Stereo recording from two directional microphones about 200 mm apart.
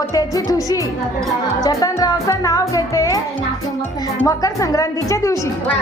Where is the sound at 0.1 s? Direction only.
15° left (ahead or behind).